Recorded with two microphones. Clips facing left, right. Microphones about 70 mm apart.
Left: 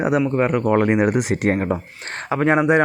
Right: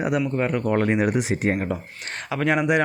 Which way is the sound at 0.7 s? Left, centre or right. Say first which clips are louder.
Left 4 dB; left.